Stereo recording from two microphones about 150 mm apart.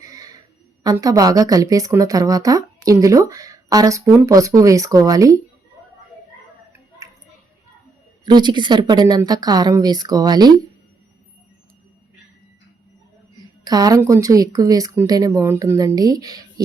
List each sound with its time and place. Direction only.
0.0 s a sound: 25° right (ahead or behind)
0.9 s a woman's voice: 25° right (ahead or behind)
8.2 s a woman's voice: 30° right (ahead or behind)
13.7 s a woman's voice: 25° right (ahead or behind)